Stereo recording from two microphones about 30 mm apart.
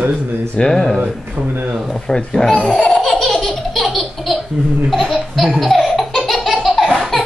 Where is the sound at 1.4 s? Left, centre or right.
Right.